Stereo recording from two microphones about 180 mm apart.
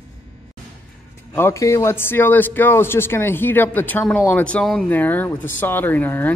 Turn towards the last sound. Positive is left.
turn(degrees=10)  # may be behind; listen again after turning